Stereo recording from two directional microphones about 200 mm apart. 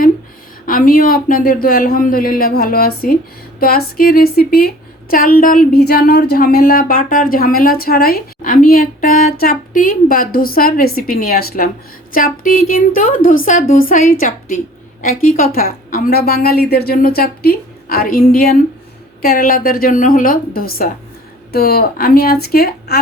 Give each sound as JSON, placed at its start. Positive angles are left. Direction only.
{"t": 0.6, "sound": "a woman's voice", "side_deg": 45}